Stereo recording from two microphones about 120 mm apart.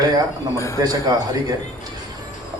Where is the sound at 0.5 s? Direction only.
25° left (ahead or behind).